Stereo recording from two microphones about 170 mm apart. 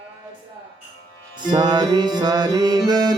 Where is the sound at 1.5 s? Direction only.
25° right (ahead or behind).